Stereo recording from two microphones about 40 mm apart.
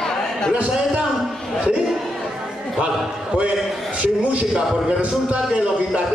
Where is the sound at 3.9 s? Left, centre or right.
Right.